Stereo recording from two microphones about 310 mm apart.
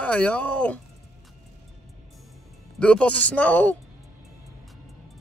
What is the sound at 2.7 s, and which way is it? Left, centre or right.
Speech, centre.